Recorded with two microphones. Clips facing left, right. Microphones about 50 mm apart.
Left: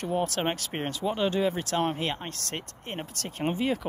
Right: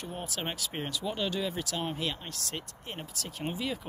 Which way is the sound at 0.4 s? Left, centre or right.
Left.